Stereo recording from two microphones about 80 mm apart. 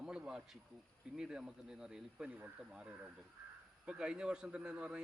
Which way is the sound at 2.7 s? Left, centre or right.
Centre.